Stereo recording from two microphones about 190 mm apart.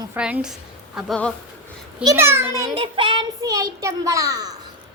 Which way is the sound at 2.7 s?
25° right (ahead or behind).